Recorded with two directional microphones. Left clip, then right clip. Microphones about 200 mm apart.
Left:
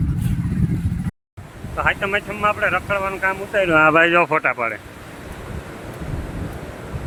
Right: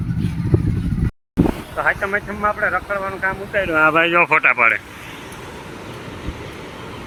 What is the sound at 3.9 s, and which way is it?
Speech, 15° left (ahead or behind).